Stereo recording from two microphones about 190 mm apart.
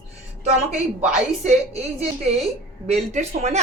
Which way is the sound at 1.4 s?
35° right (ahead or behind).